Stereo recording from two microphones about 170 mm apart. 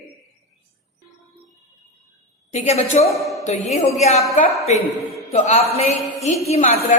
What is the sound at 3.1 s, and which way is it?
Speech, centre (ahead or behind).